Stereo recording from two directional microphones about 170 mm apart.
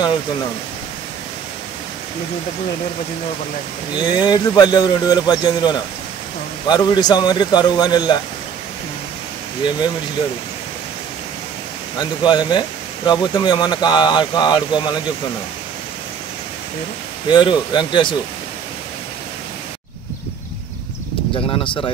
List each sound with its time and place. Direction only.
3.9 s speech: 25° left (ahead or behind)
12.0 s speech: 25° left (ahead or behind)
17.3 s speech: 25° left (ahead or behind)
21.5 s speech: 30° left (ahead or behind)